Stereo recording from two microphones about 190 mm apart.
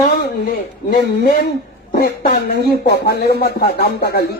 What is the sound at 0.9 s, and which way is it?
A man's voice, 50° left (ahead or behind).